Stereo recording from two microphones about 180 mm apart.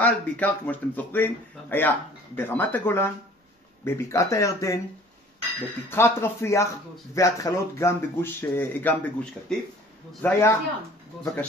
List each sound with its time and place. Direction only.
0.0 s speech: 10° left (ahead or behind)
5.9 s speech: 15° left (ahead or behind)